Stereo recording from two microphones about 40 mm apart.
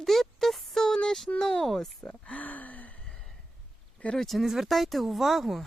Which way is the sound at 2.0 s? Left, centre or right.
Left.